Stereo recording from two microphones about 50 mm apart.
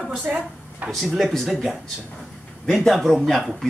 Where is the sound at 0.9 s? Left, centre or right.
Centre.